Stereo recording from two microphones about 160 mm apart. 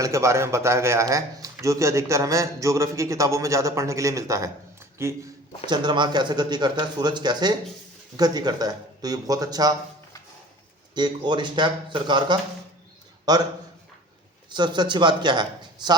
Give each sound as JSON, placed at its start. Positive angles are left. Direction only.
{"t": 0.0, "sound": "a man's voice", "side_deg": -20}
{"t": 5.6, "sound": "a man's voice", "side_deg": -30}
{"t": 10.9, "sound": "a man's voice", "side_deg": -30}
{"t": 14.5, "sound": "a man's voice", "side_deg": -30}